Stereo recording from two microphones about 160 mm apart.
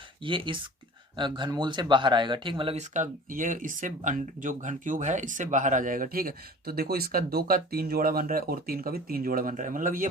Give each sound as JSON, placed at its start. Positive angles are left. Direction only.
{"t": 0.2, "sound": "speech", "side_deg": -30}